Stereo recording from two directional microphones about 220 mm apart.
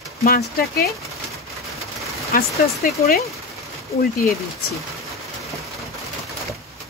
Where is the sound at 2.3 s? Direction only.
40° left (ahead or behind).